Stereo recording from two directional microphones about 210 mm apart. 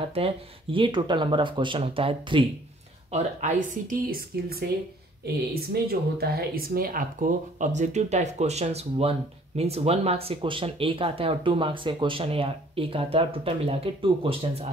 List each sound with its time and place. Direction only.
0.0 s speech: 25° right (ahead or behind)